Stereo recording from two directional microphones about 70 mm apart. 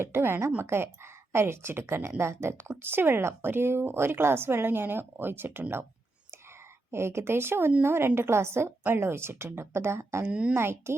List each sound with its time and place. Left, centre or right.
0.0 s a woman's voice: right
6.9 s a woman's voice: right